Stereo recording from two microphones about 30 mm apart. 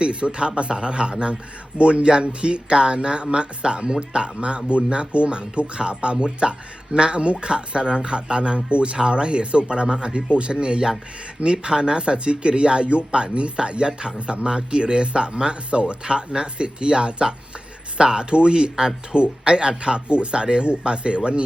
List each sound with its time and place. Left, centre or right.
0.0 s speech: right
15.3 s speech: right
15.7 s speech: right